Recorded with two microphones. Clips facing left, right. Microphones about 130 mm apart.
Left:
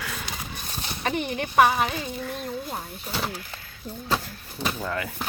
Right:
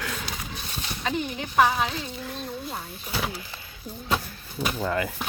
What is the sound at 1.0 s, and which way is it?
Speech, 70° left (ahead or behind).